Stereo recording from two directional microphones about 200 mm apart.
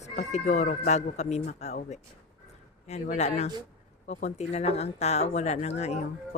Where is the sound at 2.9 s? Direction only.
35° left (ahead or behind).